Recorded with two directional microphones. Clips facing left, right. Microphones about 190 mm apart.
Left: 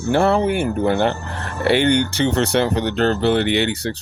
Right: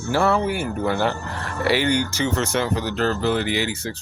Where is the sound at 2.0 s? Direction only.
65° left (ahead or behind).